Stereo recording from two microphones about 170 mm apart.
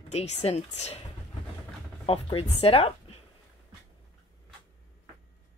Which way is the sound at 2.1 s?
30° left (ahead or behind).